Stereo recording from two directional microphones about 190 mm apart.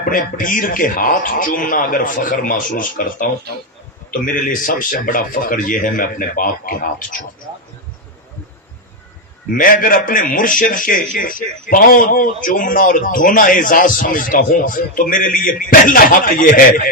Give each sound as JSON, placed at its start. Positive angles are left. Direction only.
{"t": 0.0, "sound": "a man's voice", "side_deg": 45}
{"t": 9.6, "sound": "a man's voice", "side_deg": 45}